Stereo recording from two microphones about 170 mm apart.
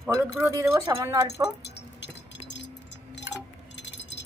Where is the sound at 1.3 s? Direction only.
85° left.